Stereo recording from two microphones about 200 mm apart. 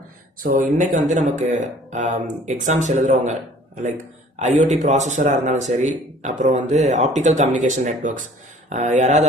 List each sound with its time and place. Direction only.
0.4 s speech: 40° right (ahead or behind)
4.4 s speech: 35° right (ahead or behind)